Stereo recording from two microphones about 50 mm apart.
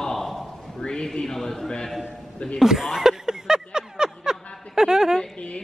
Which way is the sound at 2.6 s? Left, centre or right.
Centre.